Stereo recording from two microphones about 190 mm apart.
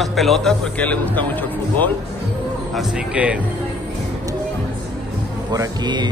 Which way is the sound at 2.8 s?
5° right (ahead or behind).